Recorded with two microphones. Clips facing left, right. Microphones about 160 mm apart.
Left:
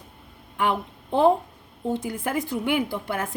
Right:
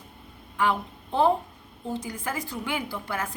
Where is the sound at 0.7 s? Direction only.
20° left (ahead or behind).